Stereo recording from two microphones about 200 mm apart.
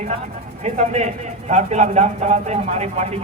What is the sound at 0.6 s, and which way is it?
A man's voice, 35° right (ahead or behind).